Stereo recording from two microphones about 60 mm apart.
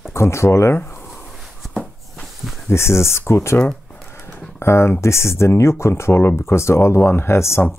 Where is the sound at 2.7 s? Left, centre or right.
Left.